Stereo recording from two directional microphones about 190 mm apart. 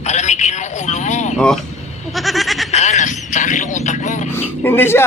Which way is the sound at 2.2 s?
Centre (ahead or behind).